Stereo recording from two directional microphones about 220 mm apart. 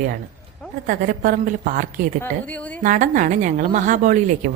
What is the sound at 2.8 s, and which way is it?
A woman's voice, 35° right (ahead or behind).